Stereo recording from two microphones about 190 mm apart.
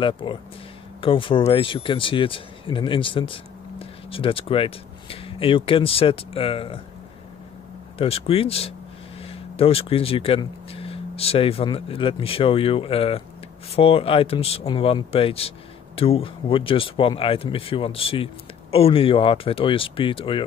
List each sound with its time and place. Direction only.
0.0 s speech: 25° left (ahead or behind)
8.0 s speech: 30° left (ahead or behind)